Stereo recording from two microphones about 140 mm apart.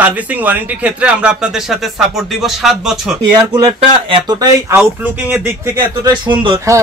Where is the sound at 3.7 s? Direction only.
40° right (ahead or behind).